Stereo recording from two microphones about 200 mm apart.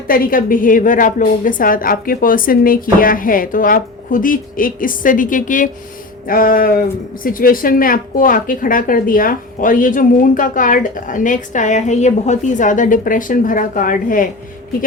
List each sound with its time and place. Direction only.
0.1 s a woman's voice: 45° left (ahead or behind)